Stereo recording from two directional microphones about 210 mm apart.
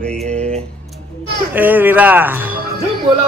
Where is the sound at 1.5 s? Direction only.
10° right (ahead or behind).